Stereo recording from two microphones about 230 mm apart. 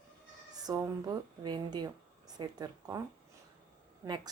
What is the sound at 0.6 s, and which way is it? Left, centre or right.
A woman's voice, centre.